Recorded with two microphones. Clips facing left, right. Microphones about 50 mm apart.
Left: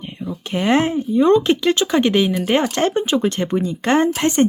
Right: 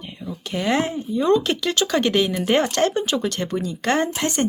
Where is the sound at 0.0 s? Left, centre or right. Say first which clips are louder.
Left 4 dB; left.